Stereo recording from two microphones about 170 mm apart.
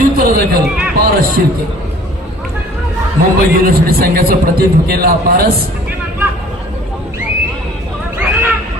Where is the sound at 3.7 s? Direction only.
60° right (ahead or behind).